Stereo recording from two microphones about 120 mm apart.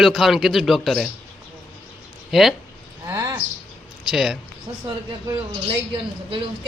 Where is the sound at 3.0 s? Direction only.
25° right (ahead or behind).